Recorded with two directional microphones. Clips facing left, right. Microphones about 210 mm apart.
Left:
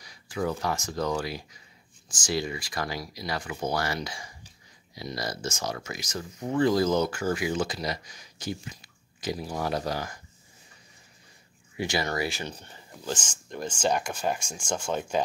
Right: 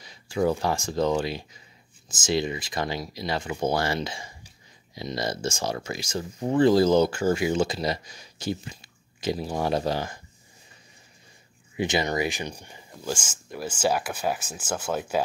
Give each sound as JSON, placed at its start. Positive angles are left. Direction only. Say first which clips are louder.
{"t": 0.0, "sound": "speech", "louder": "right 6 dB", "side_deg": -25}
{"t": 11.7, "sound": "speech", "louder": "right 4 dB", "side_deg": -20}